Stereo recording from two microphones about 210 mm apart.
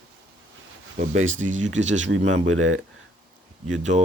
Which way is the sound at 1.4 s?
35° right (ahead or behind).